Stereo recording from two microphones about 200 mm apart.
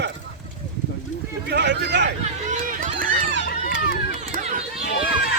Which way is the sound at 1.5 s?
60° right (ahead or behind).